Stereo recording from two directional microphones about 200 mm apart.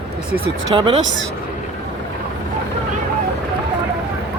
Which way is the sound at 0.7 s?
30° right (ahead or behind).